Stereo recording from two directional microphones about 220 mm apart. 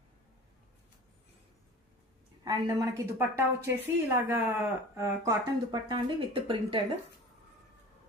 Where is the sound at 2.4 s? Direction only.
15° right (ahead or behind).